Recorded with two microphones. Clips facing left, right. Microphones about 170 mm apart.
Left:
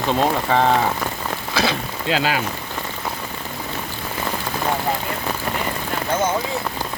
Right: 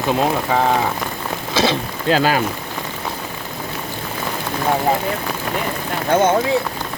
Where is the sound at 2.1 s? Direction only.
45° right (ahead or behind).